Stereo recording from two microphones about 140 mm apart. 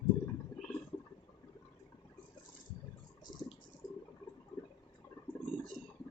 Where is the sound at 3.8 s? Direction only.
25° left (ahead or behind).